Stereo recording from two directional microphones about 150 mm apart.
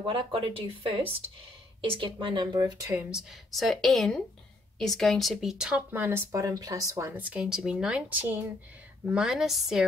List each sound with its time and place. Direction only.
0.0 s speech: 35° right (ahead or behind); by 3.1 s 20° right (ahead or behind)
3.1 s speech: centre (ahead or behind)